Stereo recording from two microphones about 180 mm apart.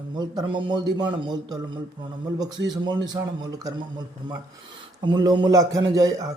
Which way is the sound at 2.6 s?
25° right (ahead or behind).